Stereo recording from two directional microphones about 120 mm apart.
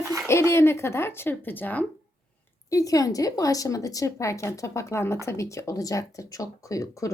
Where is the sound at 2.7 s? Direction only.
30° left (ahead or behind).